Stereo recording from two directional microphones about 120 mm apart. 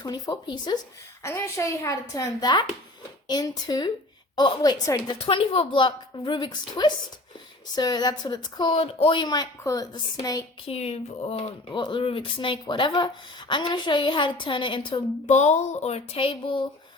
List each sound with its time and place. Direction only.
0.0 s a woman's voice: 35° left (ahead or behind)
1.2 s a woman's voice: 25° left (ahead or behind)
8.7 s a woman's voice: 55° left (ahead or behind); by 10.4 s 30° left (ahead or behind)
10.7 s a sound: 60° left (ahead or behind)
11.7 s a woman's voice: 45° left (ahead or behind)
15.3 s a sound: 70° left (ahead or behind); by 16.6 s 45° left (ahead or behind)